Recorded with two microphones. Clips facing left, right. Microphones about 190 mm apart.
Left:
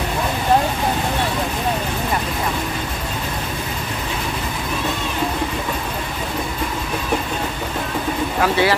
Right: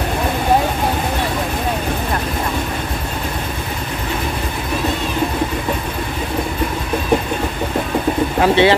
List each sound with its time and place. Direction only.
8.4 s speech: 25° right (ahead or behind)